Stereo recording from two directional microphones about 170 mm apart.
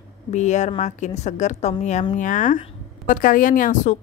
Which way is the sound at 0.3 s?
45° left (ahead or behind).